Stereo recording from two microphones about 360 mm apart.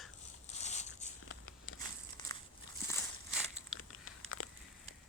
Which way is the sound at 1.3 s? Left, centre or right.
Left.